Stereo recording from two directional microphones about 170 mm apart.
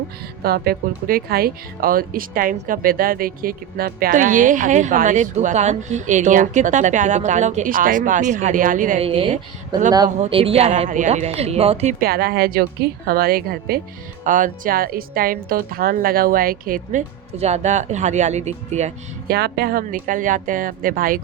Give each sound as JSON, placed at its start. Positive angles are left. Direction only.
{"t": 0.4, "sound": "speech", "side_deg": -65}
{"t": 9.0, "sound": "speech", "side_deg": -35}
{"t": 11.9, "sound": "a woman's voice", "side_deg": -65}
{"t": 14.3, "sound": "a woman's voice", "side_deg": -50}
{"t": 17.3, "sound": "speech", "side_deg": -40}
{"t": 19.3, "sound": "a woman's voice", "side_deg": -65}